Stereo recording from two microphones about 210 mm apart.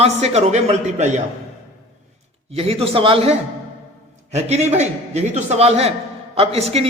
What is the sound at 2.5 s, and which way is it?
A man's voice, 30° right (ahead or behind).